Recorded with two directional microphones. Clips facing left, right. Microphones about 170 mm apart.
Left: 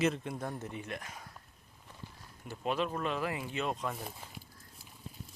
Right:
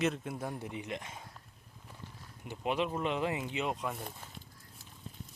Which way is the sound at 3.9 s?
Centre (ahead or behind).